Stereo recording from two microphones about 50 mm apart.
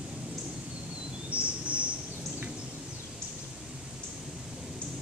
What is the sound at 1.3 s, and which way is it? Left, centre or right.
Bird, right.